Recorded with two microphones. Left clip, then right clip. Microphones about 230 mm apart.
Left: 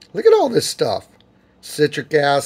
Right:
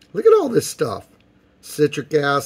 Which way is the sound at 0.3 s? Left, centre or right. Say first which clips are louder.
Left 1 dB; right.